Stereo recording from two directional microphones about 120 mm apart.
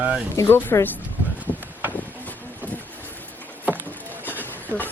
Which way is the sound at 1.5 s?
45° left (ahead or behind).